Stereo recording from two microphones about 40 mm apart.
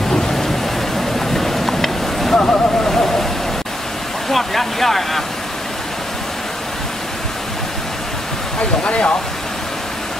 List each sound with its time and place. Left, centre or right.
0.1 s rain: centre
0.9 s vehicle: centre
2.3 s a sound: left
2.8 s a sound: centre
4.3 s speech: centre
8.5 s speech: left